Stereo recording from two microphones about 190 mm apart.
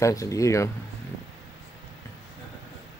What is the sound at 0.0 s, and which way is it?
Speech, 15° left (ahead or behind).